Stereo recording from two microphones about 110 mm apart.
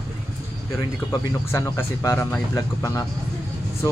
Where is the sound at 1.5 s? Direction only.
25° left (ahead or behind).